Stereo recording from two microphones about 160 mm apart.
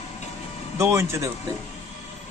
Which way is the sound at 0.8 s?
15° right (ahead or behind).